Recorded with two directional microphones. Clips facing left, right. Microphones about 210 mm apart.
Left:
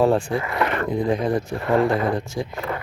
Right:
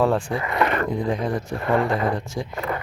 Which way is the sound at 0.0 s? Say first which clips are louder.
Left 2 dB; 30° left (ahead or behind).